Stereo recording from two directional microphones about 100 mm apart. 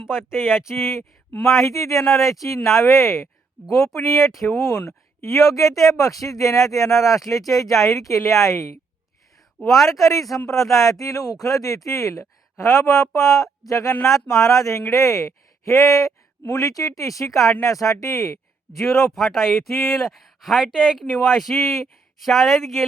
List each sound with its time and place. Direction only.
0.2 s speech: 25° left (ahead or behind)
9.6 s speech: centre (ahead or behind)
10.0 s speech: 35° left (ahead or behind)
18.8 s speech: centre (ahead or behind)